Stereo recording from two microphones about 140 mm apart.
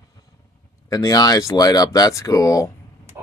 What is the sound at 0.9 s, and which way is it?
Speech, 25° left (ahead or behind).